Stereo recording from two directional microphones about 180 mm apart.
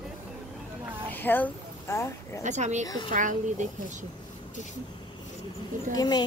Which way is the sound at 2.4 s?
40° right (ahead or behind).